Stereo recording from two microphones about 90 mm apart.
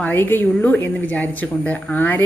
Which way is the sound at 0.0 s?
20° left (ahead or behind).